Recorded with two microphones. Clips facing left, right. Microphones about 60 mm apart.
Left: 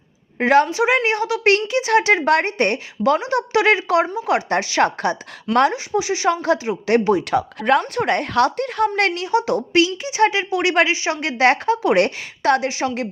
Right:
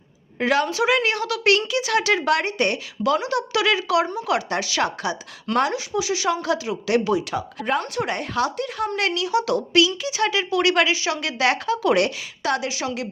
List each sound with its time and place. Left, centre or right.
0.3 s a woman's voice: left
12.0 s a woman's voice: left